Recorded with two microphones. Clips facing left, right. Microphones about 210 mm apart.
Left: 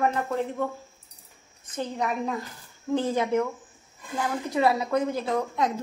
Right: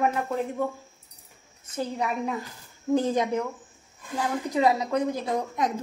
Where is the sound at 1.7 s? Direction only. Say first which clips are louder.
Even; 10° right (ahead or behind).